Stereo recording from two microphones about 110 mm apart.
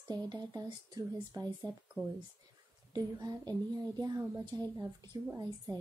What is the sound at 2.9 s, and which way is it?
Speech, 40° right (ahead or behind).